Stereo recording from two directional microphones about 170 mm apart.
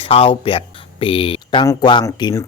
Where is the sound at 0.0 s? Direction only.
30° left (ahead or behind).